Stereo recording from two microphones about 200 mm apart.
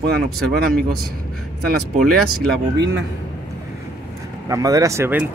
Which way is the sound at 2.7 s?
60° right (ahead or behind).